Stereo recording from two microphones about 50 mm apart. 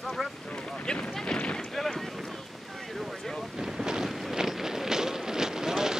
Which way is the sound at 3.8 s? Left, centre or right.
Centre.